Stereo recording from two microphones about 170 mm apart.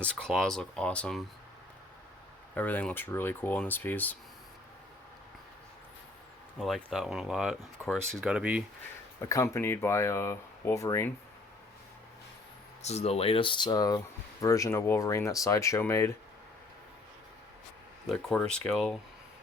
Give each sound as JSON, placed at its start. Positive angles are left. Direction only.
{"t": 0.0, "sound": "speech", "side_deg": 5}
{"t": 2.6, "sound": "speech", "side_deg": 10}
{"t": 6.6, "sound": "speech", "side_deg": 0}
{"t": 9.2, "sound": "speech", "side_deg": 20}
{"t": 12.8, "sound": "speech", "side_deg": 40}
{"t": 18.0, "sound": "speech", "side_deg": 5}